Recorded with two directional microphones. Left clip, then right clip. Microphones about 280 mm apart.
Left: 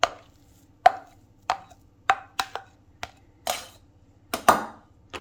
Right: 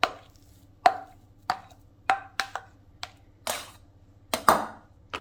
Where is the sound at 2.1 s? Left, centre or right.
Left.